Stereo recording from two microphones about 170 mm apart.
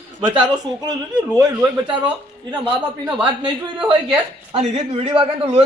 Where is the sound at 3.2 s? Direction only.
30° right (ahead or behind).